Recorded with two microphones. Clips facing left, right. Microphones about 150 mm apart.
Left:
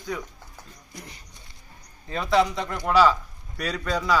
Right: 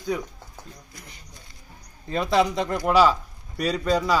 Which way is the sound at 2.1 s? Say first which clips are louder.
Right 1 dB; 30° right (ahead or behind).